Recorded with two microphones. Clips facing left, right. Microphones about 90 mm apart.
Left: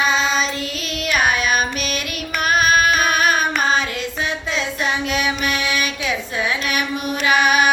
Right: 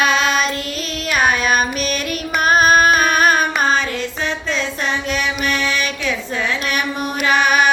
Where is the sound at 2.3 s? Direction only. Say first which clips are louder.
Right 3 dB; 40° right (ahead or behind).